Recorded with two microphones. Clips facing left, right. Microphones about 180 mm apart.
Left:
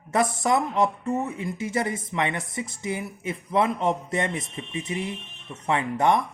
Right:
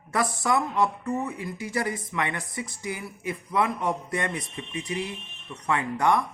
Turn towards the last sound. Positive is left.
turn(degrees=20)  # may be behind; listen again after turning